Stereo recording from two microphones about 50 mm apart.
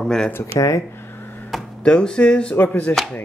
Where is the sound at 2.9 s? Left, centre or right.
Left.